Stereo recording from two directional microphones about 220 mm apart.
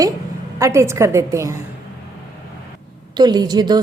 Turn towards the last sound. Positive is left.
turn(degrees=-20)  # may be behind; listen again after turning